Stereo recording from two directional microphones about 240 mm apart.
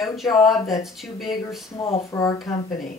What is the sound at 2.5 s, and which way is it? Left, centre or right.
Speech, left.